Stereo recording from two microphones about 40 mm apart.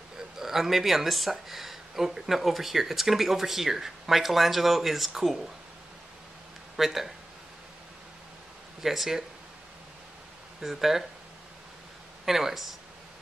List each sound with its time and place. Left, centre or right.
0.4 s speech: centre
6.8 s speech: centre
8.8 s speech: centre
10.6 s speech: centre
12.3 s speech: centre